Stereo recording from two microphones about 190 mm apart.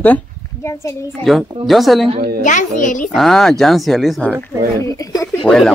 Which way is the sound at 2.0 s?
30° right (ahead or behind).